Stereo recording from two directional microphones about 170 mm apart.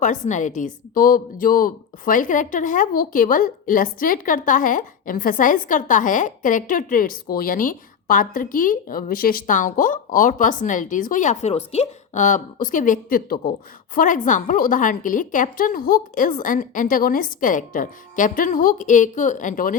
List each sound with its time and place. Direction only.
0.0 s a woman's voice: 45° left (ahead or behind)